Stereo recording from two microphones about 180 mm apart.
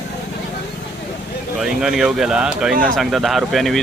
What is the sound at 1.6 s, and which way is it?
Speech, centre (ahead or behind).